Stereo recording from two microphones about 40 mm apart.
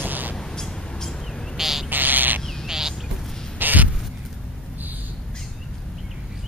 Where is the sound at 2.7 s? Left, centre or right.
Centre.